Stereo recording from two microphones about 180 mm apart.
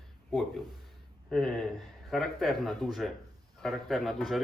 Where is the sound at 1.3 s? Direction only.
Centre (ahead or behind).